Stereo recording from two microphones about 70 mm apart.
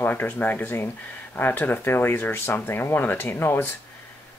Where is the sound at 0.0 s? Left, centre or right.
Left.